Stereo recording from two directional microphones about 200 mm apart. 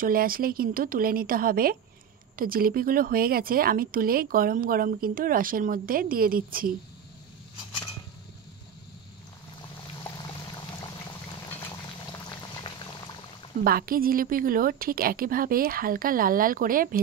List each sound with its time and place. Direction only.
0.0 s speech: 45° right (ahead or behind)
10.0 s pour: 20° left (ahead or behind)
12.1 s boiling: 20° left (ahead or behind)
13.7 s speech: 45° right (ahead or behind)